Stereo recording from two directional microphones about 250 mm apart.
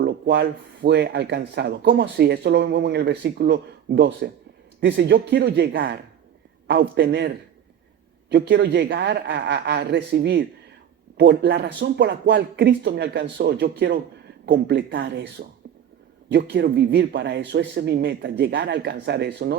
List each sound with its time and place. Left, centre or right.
0.0 s speech: right
8.3 s speech: right
16.3 s speech: right